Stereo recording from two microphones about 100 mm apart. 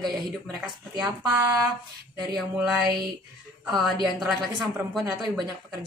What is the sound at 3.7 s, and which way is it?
Speech, centre (ahead or behind).